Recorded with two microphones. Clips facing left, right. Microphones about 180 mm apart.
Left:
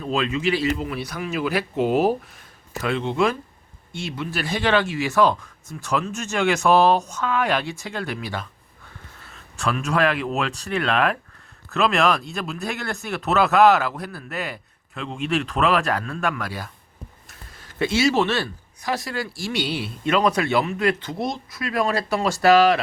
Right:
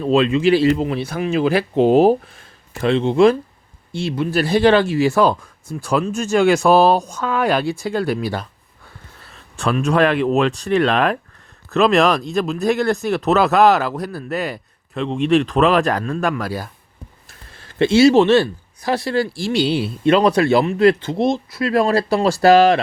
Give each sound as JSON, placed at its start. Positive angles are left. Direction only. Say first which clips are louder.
{"t": 0.0, "sound": "speech", "louder": "right 8 dB", "side_deg": -30}
{"t": 9.6, "sound": "speech", "louder": "right 5 dB", "side_deg": -30}